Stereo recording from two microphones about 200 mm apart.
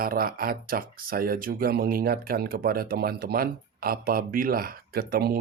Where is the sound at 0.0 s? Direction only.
45° right (ahead or behind).